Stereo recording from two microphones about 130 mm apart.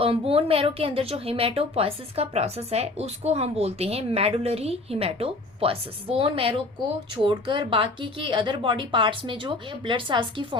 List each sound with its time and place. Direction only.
0.0 s a woman's voice: 45° right (ahead or behind)